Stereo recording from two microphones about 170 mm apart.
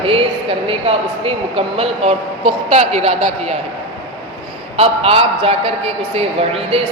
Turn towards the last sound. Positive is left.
turn(degrees=-35)  # may be behind; listen again after turning